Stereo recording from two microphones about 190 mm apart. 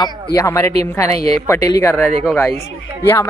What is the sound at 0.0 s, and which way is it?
Speech, 15° left (ahead or behind).